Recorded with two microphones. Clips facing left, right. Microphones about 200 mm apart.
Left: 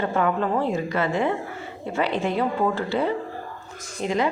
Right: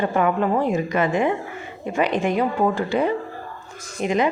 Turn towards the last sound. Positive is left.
turn(degrees=-20)  # may be behind; listen again after turning